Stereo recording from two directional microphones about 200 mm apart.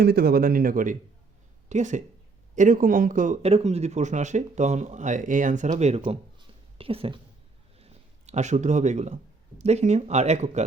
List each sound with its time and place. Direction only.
0.0 s speech: 50° right (ahead or behind); by 7.2 s 30° right (ahead or behind)
7.8 s a sound: 30° right (ahead or behind)
9.6 s speech: 35° right (ahead or behind)